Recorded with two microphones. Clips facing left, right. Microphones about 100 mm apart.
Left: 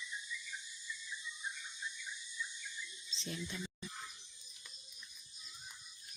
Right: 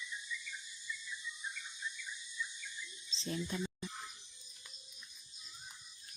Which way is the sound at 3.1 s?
35° right (ahead or behind).